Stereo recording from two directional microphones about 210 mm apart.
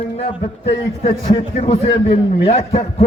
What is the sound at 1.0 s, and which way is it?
A man's voice, 30° left (ahead or behind).